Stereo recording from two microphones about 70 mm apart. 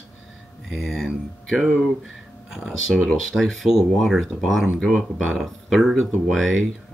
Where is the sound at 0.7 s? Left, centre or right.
Centre.